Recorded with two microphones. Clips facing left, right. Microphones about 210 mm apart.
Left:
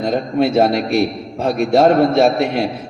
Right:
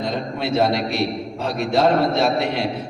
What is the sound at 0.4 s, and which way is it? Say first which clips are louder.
A man's voice: left 3 dB; 50° left (ahead or behind).